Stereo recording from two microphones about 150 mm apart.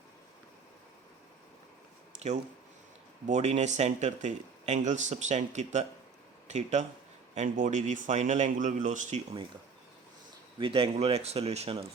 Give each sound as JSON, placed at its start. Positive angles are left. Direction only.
{"t": 3.2, "sound": "speech", "side_deg": -50}
{"t": 10.6, "sound": "speech", "side_deg": -35}